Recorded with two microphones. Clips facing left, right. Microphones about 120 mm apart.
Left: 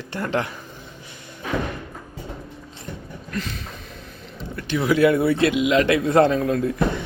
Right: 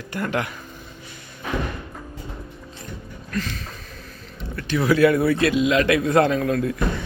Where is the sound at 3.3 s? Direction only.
25° left (ahead or behind).